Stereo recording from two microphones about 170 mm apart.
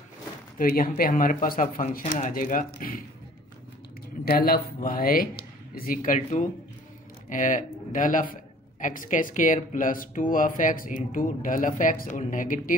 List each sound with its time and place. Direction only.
0.6 s speech: 60° left (ahead or behind)
4.2 s speech: 60° left (ahead or behind)